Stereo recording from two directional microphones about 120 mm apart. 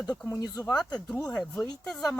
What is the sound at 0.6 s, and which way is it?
Speech, 5° left (ahead or behind).